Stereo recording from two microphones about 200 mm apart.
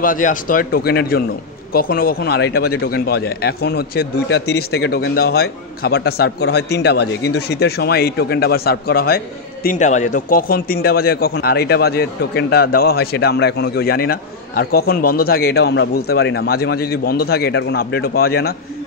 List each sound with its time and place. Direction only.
0.0 s speech: 40° left (ahead or behind)